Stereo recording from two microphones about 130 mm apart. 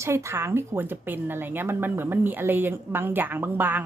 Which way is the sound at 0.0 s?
20° right (ahead or behind).